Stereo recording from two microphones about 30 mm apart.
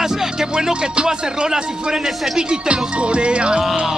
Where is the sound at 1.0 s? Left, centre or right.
Right.